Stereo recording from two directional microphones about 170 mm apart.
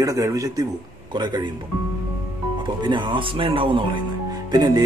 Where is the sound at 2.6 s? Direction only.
25° right (ahead or behind).